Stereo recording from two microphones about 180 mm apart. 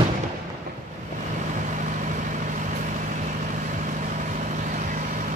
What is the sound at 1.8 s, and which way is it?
Vehicle, 45° right (ahead or behind).